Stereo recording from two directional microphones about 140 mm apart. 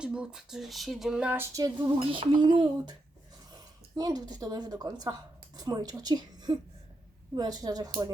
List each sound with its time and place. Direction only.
0.0 s speech: 5° right (ahead or behind)
1.5 s a woman's voice: 25° right (ahead or behind)
2.0 s a woman's voice: 35° right (ahead or behind)